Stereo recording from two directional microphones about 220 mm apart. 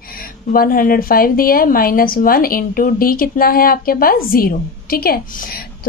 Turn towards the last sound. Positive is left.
turn(degrees=45)  # may be behind; listen again after turning